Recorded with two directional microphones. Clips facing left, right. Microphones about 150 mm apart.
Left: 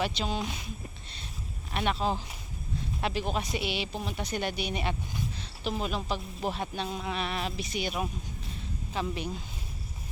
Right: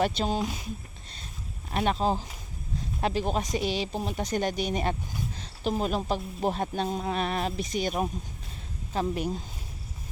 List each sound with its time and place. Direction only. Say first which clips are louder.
0.0 s speech: right 5 dB; 45° right (ahead or behind)
1.7 s speech: right 3 dB; 40° right (ahead or behind)
5.4 s a sound: right 6 dB; 40° right (ahead or behind)
6.1 s speech: right 4 dB; 45° right (ahead or behind)